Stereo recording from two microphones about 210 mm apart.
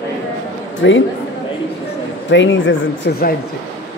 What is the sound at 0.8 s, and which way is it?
Speech, 60° left (ahead or behind).